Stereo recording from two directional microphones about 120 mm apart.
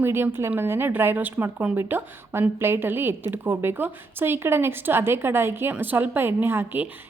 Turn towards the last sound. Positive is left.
turn(degrees=-15)  # may be behind; listen again after turning